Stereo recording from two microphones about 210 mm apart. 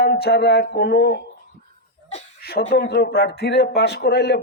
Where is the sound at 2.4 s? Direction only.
50° left (ahead or behind).